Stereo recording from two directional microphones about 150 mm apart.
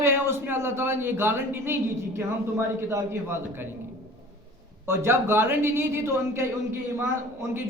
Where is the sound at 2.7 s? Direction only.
15° right (ahead or behind).